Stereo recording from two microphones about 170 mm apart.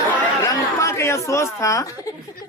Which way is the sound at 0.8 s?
15° left (ahead or behind).